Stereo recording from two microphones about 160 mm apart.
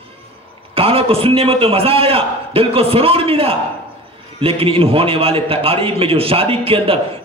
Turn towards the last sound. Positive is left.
turn(degrees=-35)  # may be behind; listen again after turning